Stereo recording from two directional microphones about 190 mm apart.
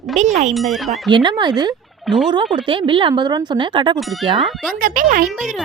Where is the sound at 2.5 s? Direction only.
25° right (ahead or behind).